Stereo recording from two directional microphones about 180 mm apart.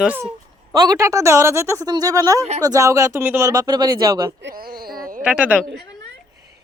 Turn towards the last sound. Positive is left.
turn(degrees=-10)  # may be behind; listen again after turning